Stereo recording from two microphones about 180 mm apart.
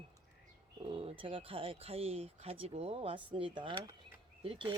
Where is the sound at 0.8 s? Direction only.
30° right (ahead or behind).